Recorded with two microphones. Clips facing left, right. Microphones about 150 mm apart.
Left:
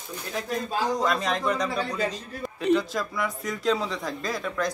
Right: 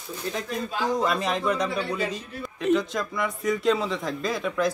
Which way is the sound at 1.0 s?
5° right (ahead or behind).